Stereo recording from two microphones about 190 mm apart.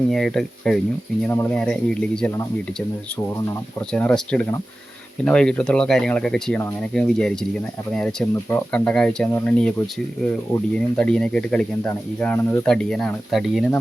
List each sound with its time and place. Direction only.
0.1 s speech: centre (ahead or behind)
3.8 s speech: 10° left (ahead or behind)